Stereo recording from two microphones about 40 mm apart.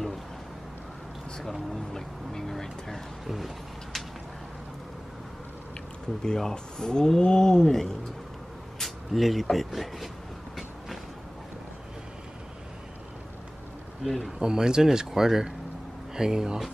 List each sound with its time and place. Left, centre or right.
1.4 s speech: centre
2.3 s vehicle: centre
3.3 s a sound: centre
6.2 s speech: centre
14.0 s speech: centre
14.4 s speech: centre